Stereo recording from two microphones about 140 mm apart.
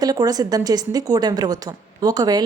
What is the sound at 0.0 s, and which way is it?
A woman's voice, 30° right (ahead or behind).